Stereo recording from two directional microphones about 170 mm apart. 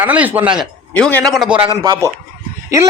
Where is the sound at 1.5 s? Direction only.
30° right (ahead or behind).